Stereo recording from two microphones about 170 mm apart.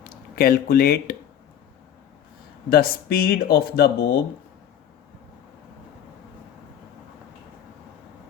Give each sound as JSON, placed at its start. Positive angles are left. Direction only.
{"t": 0.0, "sound": "speech", "side_deg": 65}
{"t": 2.6, "sound": "speech", "side_deg": 60}